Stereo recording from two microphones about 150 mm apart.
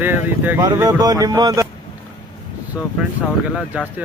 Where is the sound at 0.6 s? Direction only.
25° right (ahead or behind).